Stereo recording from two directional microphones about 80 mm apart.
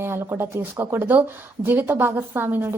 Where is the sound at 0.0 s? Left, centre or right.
Right.